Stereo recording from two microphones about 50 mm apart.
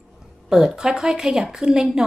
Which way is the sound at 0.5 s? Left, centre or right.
Centre.